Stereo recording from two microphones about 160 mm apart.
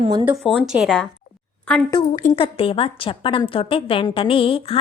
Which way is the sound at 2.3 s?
35° left (ahead or behind).